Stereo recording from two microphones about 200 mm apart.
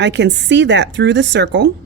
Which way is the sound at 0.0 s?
60° right (ahead or behind).